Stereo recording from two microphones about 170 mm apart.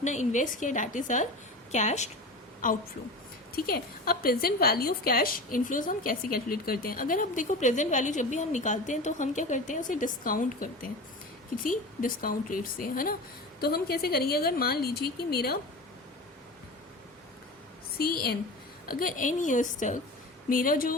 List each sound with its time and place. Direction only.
0.0 s a woman's voice: 45° left (ahead or behind)
13.6 s speech: 65° left (ahead or behind)
17.9 s a woman's voice: 65° left (ahead or behind)
18.9 s a woman's voice: 55° left (ahead or behind)